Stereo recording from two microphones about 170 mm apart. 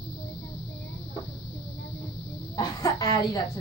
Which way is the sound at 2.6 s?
20° left (ahead or behind).